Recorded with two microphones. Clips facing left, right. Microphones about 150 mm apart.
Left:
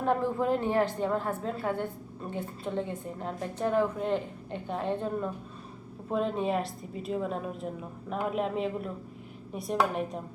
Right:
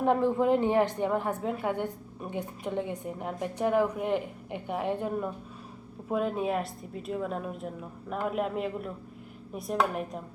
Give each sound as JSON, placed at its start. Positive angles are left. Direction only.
{"t": 0.0, "sound": "a woman's voice", "side_deg": -20}